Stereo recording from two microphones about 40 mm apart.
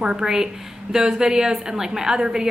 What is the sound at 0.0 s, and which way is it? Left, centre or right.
Speech, centre.